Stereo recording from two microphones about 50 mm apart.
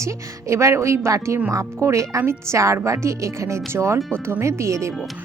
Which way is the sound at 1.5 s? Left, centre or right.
Right.